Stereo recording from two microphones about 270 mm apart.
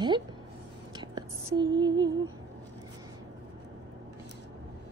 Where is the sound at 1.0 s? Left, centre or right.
Centre.